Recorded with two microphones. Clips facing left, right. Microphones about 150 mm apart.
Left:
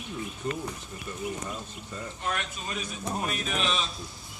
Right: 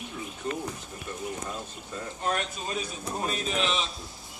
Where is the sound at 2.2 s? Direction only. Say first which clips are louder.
Right 4 dB; 30° right (ahead or behind).